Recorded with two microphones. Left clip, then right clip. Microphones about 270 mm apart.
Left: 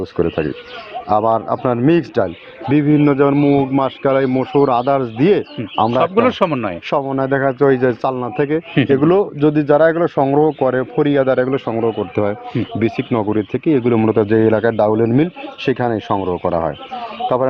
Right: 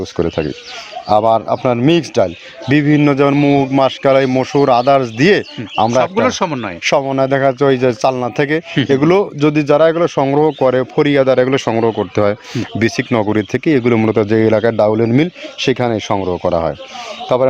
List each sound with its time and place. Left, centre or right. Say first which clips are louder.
0.0 s speech: right 1 dB; right
6.0 s speech: even; centre
6.8 s speech: right 7 dB; right